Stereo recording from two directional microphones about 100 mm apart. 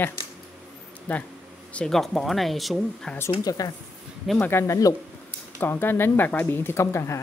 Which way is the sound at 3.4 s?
40° left (ahead or behind).